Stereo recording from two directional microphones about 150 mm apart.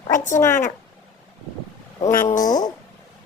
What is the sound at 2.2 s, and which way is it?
Speech, 60° left (ahead or behind).